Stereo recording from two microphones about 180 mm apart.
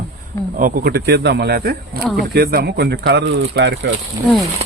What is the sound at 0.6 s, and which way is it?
Speech, 60° right (ahead or behind).